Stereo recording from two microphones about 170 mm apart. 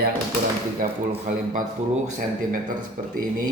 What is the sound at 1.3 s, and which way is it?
Speech, 45° right (ahead or behind).